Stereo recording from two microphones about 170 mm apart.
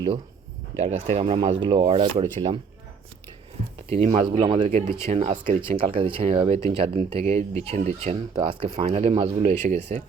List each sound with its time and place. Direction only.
0.8 s speech: 40° right (ahead or behind)
3.8 s speech: 35° right (ahead or behind)
5.5 s speech: 30° right (ahead or behind)